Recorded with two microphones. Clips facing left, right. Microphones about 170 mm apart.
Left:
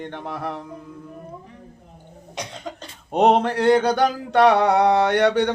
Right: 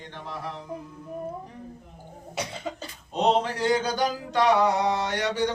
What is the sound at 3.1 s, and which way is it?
Mantra, 60° left (ahead or behind).